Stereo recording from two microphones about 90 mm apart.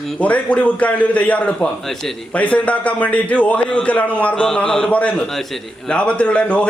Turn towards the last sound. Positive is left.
turn(degrees=15)  # may be behind; listen again after turning